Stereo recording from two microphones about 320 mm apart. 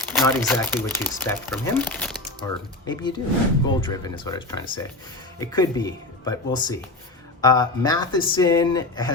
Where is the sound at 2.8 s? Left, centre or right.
Centre.